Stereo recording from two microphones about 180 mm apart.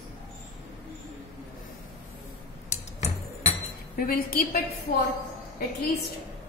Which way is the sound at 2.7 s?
40° left (ahead or behind).